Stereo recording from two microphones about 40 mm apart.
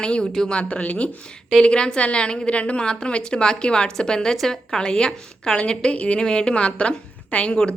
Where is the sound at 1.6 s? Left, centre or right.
Left.